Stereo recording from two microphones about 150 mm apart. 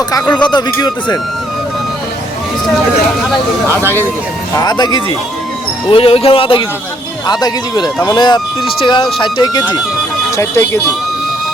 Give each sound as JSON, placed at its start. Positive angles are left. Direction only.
{"t": 0.4, "sound": "speech", "side_deg": 30}
{"t": 4.5, "sound": "speech", "side_deg": 30}